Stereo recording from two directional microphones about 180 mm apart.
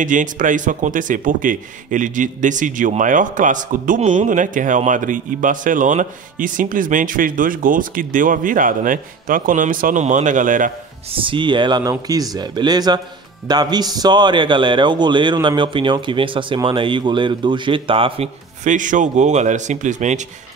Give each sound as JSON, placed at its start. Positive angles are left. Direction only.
{"t": 0.0, "sound": "a man's voice", "side_deg": -45}
{"t": 11.1, "sound": "a man's voice", "side_deg": -30}